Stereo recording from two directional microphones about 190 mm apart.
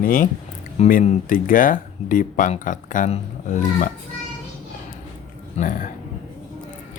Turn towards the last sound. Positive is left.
turn(degrees=35)  # may be behind; listen again after turning